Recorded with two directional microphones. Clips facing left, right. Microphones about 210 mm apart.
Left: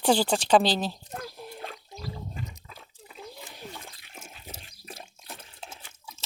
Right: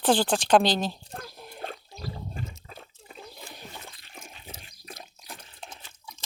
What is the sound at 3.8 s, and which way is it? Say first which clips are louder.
Toilet flush: even; 10° left (ahead or behind).